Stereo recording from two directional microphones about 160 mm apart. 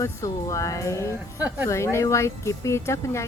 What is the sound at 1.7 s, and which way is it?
Speech, 20° left (ahead or behind).